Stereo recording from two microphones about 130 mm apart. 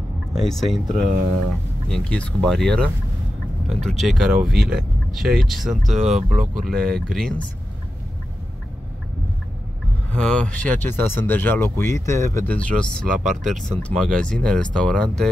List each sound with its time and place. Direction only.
0.3 s speech: centre (ahead or behind)
1.9 s speech: 10° left (ahead or behind)
10.2 s speech: 10° left (ahead or behind)
12.5 s speech: 10° left (ahead or behind)
13.0 s speech: 90° right
13.5 s speech: 5° left (ahead or behind)